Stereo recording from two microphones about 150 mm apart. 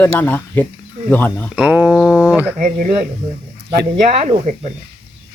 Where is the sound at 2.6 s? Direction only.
65° right (ahead or behind).